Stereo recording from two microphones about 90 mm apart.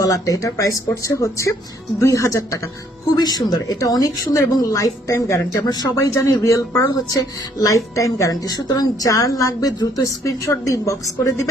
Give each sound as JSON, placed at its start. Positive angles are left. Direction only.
{"t": 0.0, "sound": "speech", "side_deg": 40}
{"t": 5.6, "sound": "speech", "side_deg": 45}